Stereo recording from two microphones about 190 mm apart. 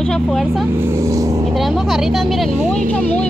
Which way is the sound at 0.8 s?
15° right (ahead or behind).